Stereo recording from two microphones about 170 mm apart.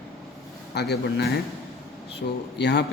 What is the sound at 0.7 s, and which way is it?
Speech, 75° left (ahead or behind).